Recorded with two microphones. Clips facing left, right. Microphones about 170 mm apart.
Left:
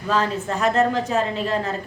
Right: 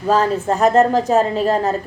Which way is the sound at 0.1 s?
40° right (ahead or behind).